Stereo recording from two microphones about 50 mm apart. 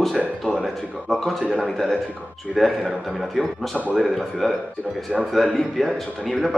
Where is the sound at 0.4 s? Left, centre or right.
Centre.